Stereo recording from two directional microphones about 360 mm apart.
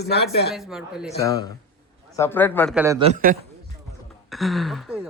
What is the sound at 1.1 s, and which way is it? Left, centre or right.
A man's voice, centre.